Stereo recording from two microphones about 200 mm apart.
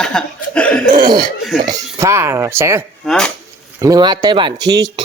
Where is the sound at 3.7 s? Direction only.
15° right (ahead or behind).